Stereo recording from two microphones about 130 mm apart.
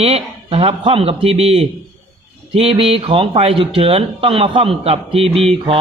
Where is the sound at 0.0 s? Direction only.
50° right (ahead or behind).